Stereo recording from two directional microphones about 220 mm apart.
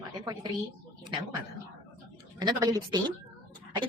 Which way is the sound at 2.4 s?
20° right (ahead or behind).